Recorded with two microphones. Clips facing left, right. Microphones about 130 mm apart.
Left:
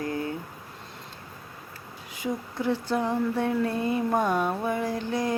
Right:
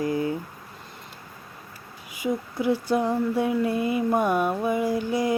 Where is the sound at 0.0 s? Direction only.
15° right (ahead or behind).